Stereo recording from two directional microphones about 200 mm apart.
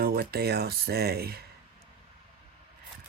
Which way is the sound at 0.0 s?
50° right (ahead or behind).